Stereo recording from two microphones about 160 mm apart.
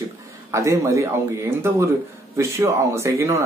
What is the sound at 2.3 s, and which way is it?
A man's voice, 15° right (ahead or behind).